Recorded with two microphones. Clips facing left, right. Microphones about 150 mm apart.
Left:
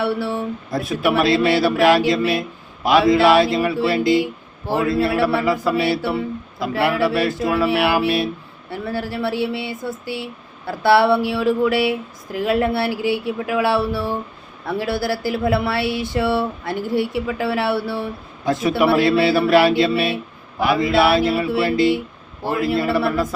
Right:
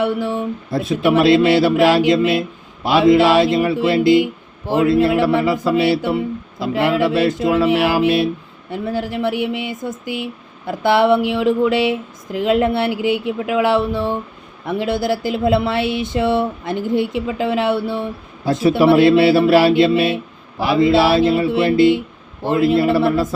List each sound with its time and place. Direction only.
0.0 s speech: 20° right (ahead or behind)